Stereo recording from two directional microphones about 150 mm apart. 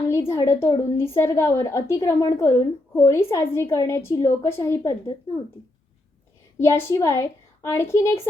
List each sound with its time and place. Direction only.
0.1 s a woman's voice: 20° left (ahead or behind)
6.6 s a woman's voice: 20° left (ahead or behind)